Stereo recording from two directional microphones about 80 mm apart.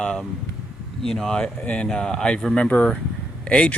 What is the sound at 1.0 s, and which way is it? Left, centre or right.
Speech, centre.